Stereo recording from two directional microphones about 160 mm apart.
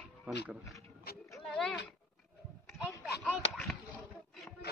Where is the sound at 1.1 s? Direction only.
75° left (ahead or behind).